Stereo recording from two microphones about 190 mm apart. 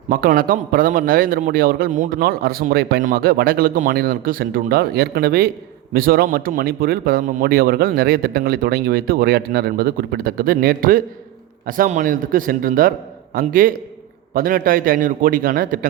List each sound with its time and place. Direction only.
0.1 s a man's voice: 50° right (ahead or behind)